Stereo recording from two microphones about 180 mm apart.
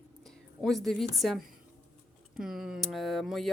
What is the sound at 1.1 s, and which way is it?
Speech, centre (ahead or behind).